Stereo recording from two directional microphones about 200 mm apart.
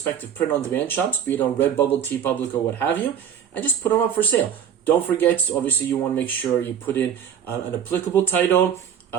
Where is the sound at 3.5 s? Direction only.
10° left (ahead or behind).